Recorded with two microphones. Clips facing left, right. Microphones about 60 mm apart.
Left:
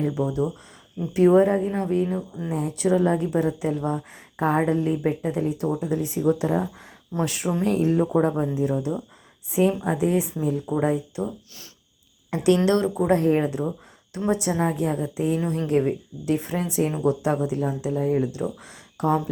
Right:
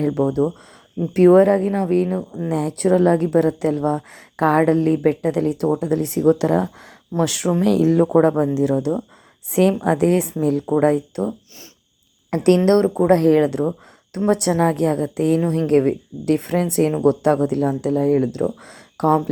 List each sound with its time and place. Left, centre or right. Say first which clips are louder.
0.0 s speech: right 6 dB; right
2.5 s a woman's voice: right 5 dB; right
7.6 s a woman's voice: right 6 dB; right
13.1 s speech: right 6 dB; right